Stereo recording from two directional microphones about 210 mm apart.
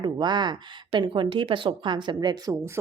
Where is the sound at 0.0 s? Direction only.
20° right (ahead or behind).